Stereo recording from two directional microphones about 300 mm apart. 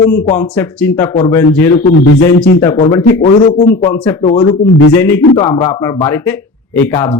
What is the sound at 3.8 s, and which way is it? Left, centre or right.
Speech, centre.